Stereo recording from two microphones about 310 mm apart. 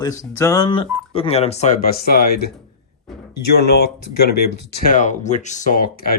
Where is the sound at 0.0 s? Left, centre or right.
Centre; by 2.5 s left.